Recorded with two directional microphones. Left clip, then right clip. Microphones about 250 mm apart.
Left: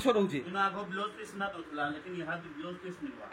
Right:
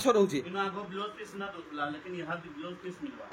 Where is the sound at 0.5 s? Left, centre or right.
Centre.